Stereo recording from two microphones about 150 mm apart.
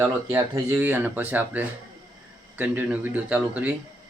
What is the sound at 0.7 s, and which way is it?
Speech, 10° right (ahead or behind).